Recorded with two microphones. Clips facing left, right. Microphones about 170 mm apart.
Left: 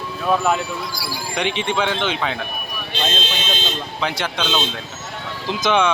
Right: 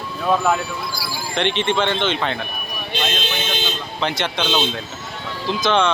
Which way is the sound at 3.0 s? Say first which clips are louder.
Left 1 dB; 25° left (ahead or behind).